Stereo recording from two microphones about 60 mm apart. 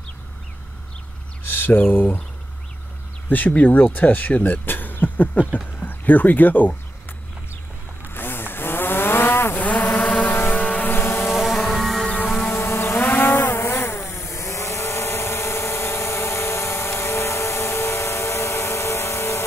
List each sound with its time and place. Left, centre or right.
1.5 s speech: left
3.3 s speech: left
8.1 s vehicle: left
9.7 s vehicle: left
10.9 s vehicle: left
11.2 s music: centre
12.3 s a sound: centre
12.5 s a sound: left